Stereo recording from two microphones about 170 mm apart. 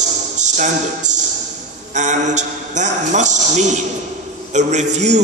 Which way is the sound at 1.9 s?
45° right (ahead or behind).